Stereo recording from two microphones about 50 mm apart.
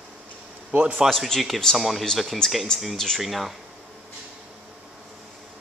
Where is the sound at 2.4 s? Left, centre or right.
Centre.